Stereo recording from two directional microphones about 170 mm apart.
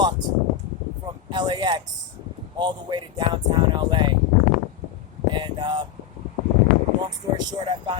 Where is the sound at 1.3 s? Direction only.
25° right (ahead or behind).